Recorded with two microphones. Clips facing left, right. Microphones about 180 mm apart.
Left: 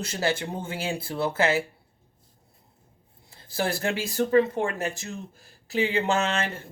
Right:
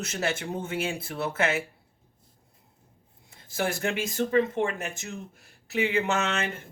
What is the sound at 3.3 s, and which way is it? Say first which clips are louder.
Speech: left 1 dB; 35° left (ahead or behind).